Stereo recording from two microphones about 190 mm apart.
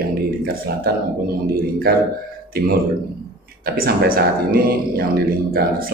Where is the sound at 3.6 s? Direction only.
50° right (ahead or behind).